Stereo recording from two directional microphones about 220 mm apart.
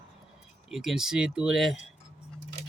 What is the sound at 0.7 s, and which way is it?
Speech, centre (ahead or behind).